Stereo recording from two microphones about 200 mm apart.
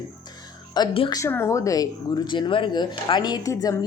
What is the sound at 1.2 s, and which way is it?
Speech, 15° left (ahead or behind).